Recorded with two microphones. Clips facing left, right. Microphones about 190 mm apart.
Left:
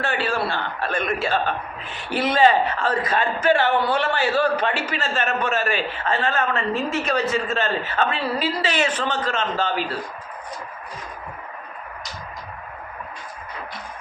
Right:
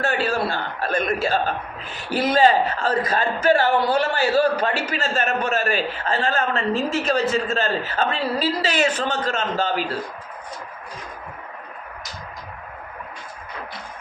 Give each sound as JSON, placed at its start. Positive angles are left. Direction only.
{"t": 0.0, "sound": "a man's voice", "side_deg": -40}